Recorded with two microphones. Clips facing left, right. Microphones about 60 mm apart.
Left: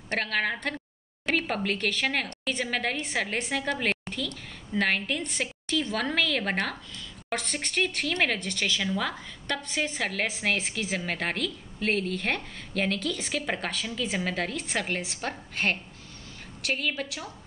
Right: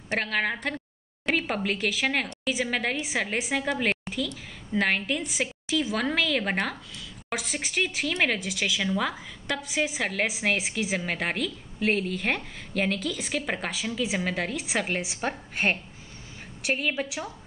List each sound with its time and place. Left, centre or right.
0.1 s speech: centre